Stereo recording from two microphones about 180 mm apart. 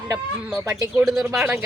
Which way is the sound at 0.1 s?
15° right (ahead or behind).